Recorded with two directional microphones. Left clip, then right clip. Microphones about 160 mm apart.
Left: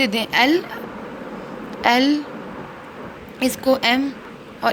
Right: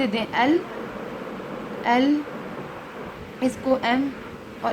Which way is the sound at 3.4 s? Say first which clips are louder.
Left 4 dB; 65° left (ahead or behind).